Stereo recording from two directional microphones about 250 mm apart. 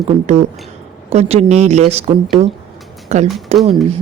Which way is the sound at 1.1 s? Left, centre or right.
Right.